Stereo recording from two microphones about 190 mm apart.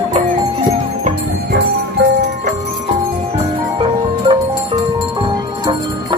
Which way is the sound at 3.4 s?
30° right (ahead or behind).